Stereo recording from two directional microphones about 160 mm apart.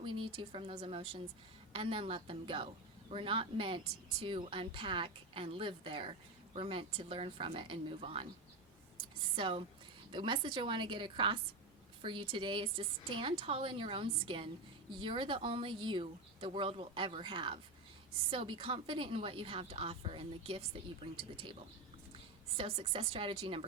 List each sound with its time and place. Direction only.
0.0 s a woman's voice: 30° right (ahead or behind)
9.3 s a woman's voice: 35° right (ahead or behind)
22.5 s a woman's voice: 35° right (ahead or behind)